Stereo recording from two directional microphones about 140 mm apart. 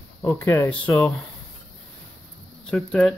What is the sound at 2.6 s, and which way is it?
Speech, 5° left (ahead or behind).